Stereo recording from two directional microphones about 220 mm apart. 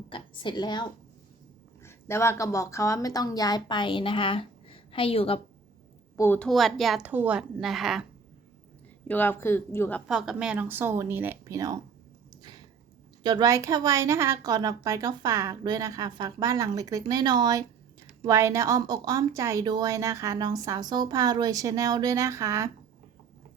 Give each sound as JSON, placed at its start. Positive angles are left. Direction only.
{"t": 0.1, "sound": "a woman's voice", "side_deg": 20}
{"t": 6.1, "sound": "a woman's voice", "side_deg": 10}
{"t": 9.0, "sound": "speech", "side_deg": 10}
{"t": 10.1, "sound": "a woman's voice", "side_deg": 0}
{"t": 12.3, "sound": "a sound", "side_deg": -20}
{"t": 13.2, "sound": "a woman's voice", "side_deg": -20}